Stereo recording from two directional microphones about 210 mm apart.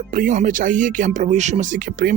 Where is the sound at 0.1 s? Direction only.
40° right (ahead or behind).